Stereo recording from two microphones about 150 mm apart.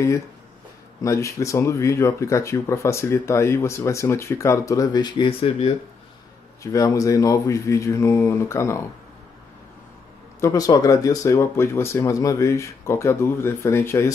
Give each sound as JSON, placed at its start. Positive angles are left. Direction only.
{"t": 1.0, "sound": "speech", "side_deg": 20}
{"t": 6.6, "sound": "speech", "side_deg": 20}
{"t": 10.4, "sound": "speech", "side_deg": 25}